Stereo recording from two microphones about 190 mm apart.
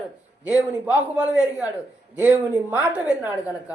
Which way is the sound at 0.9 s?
5° right (ahead or behind).